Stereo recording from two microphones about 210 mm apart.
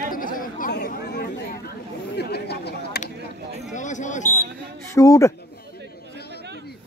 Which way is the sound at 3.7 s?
35° left (ahead or behind).